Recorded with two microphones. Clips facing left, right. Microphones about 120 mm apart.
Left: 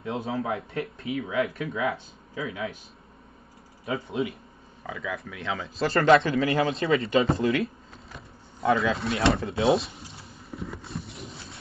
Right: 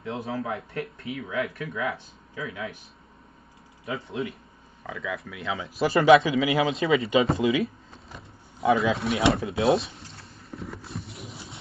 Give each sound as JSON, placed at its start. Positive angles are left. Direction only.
{"t": 0.0, "sound": "speech", "side_deg": 25}
{"t": 3.9, "sound": "speech", "side_deg": 0}